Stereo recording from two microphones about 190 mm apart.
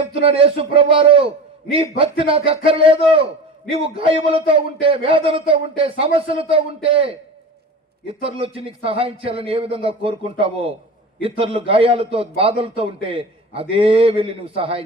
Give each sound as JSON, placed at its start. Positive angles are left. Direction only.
{"t": 0.1, "sound": "a man's voice", "side_deg": -30}
{"t": 8.2, "sound": "a man's voice", "side_deg": -30}